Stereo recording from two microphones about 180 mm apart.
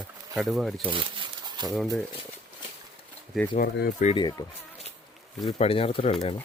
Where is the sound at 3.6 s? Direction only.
60° left (ahead or behind).